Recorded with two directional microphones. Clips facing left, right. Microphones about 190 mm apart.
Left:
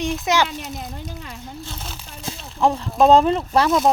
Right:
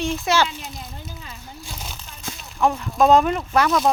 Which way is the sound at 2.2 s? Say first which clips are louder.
Left 1 dB; 30° left (ahead or behind).